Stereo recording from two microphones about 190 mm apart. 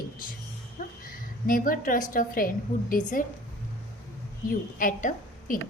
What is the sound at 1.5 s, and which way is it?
A woman's voice, 45° left (ahead or behind).